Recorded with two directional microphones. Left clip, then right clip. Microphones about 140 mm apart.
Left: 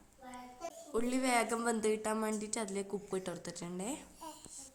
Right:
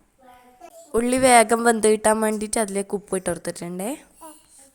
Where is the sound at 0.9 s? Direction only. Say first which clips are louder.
Right 17 dB; 65° right (ahead or behind).